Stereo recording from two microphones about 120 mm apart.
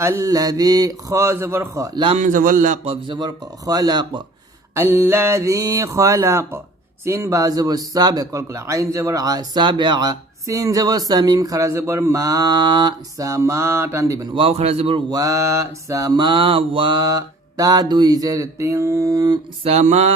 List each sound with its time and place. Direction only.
0.0 s speech: 25° right (ahead or behind)
2.1 s a man's voice: 90° right
3.1 s mantra: 35° right (ahead or behind)
4.7 s speech: 20° right (ahead or behind)
14.3 s speech: 55° right (ahead or behind)
15.1 s mantra: 30° right (ahead or behind)
19.6 s a sound: 65° right (ahead or behind)